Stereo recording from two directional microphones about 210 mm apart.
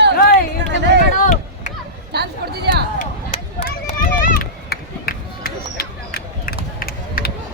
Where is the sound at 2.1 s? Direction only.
50° right (ahead or behind).